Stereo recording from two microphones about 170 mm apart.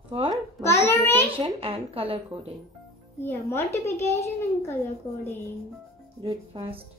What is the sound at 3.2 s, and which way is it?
A child's voice, 15° left (ahead or behind).